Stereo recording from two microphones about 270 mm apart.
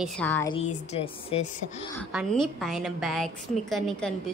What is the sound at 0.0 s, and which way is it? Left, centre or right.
Speech, centre.